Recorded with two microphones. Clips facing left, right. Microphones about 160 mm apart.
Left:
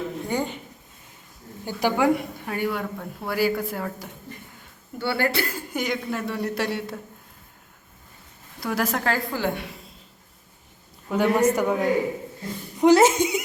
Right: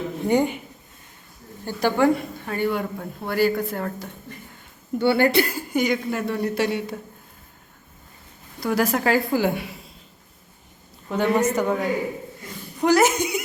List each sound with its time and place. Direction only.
0.3 s a woman's voice: 15° right (ahead or behind)
1.6 s speech: 10° left (ahead or behind)
4.9 s a woman's voice: 20° right (ahead or behind)
5.7 s speech: centre (ahead or behind)
8.6 s a woman's voice: centre (ahead or behind)
11.1 s speech: 10° left (ahead or behind)
12.8 s speech: 25° left (ahead or behind)